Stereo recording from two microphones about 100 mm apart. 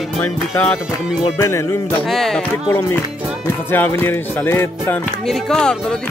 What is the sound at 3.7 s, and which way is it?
Music, 20° left (ahead or behind).